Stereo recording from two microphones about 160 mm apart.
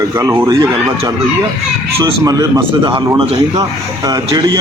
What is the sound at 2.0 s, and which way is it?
A man's voice, 25° right (ahead or behind).